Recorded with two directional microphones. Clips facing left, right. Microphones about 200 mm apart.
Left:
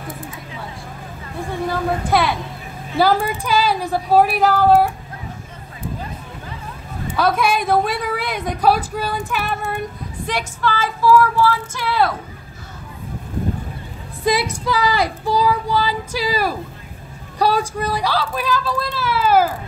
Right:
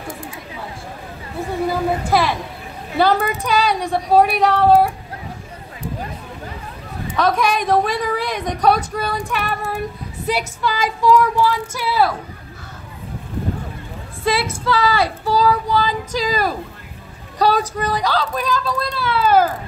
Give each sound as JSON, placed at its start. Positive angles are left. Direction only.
{"t": 1.7, "sound": "a woman's voice", "side_deg": 0}
{"t": 7.2, "sound": "a woman's voice", "side_deg": 5}
{"t": 14.2, "sound": "speech", "side_deg": 15}